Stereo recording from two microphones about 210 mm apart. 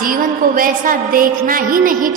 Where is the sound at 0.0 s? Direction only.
40° right (ahead or behind).